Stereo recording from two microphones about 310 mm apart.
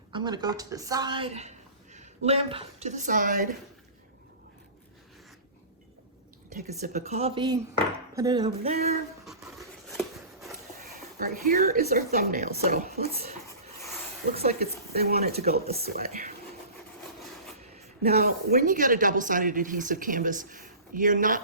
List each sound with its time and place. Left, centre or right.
0.1 s a woman's voice: centre
6.5 s a woman's voice: right
9.2 s a sound: centre
11.4 s a woman's voice: right
17.7 s a woman's voice: right